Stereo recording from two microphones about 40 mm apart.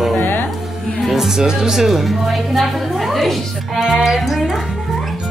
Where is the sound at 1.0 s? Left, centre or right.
Centre.